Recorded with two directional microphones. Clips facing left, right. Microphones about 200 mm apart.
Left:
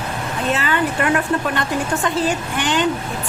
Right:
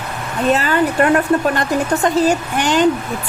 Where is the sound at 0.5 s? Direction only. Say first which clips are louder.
Right 4 dB; 40° right (ahead or behind).